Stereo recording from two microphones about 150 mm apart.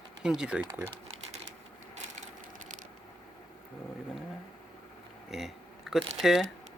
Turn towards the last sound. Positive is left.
turn(degrees=0)  # may be behind; listen again after turning